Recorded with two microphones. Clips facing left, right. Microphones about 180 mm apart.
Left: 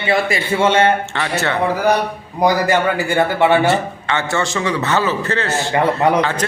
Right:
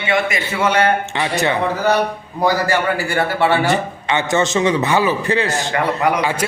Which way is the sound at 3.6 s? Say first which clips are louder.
Left 1 dB; 15° right (ahead or behind).